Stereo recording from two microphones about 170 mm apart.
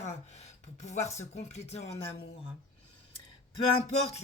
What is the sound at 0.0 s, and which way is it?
Speech, 40° left (ahead or behind).